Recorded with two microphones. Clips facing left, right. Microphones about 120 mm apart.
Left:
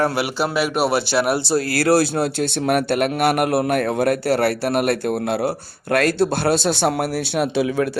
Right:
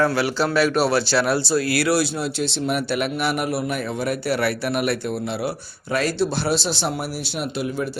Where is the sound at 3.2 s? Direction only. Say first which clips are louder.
Left 5 dB; 60° left (ahead or behind); by 7.9 s 80° left.